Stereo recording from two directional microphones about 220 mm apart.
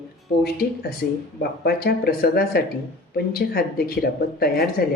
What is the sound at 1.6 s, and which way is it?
Speech, 45° left (ahead or behind).